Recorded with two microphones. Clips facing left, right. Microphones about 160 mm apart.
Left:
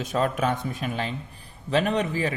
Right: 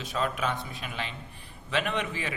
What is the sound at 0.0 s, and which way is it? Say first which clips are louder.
A man's voice: left 5 dB; 45° left (ahead or behind).